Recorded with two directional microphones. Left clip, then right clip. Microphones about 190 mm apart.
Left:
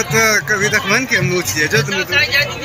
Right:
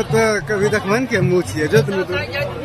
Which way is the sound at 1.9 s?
65° right (ahead or behind).